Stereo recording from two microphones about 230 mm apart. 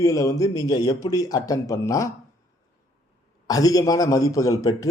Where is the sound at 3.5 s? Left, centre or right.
Centre.